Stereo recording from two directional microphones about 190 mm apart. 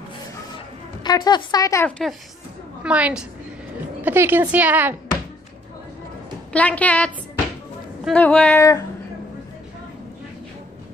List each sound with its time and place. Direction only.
1.0 s a woman's voice: 20° left (ahead or behind); by 2.1 s 5° left (ahead or behind)
2.8 s a woman's voice: 5° right (ahead or behind)
6.5 s speech: 5° left (ahead or behind)